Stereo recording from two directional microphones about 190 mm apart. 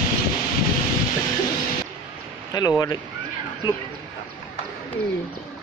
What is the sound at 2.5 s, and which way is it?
Speech, 20° left (ahead or behind).